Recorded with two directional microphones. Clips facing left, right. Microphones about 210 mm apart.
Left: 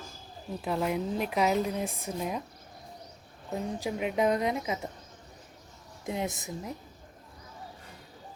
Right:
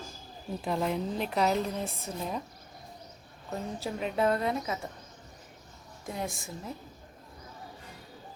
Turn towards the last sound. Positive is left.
turn(degrees=20)  # may be behind; listen again after turning